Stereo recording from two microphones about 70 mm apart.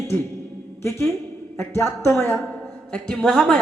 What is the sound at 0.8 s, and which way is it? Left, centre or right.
A man's voice, left.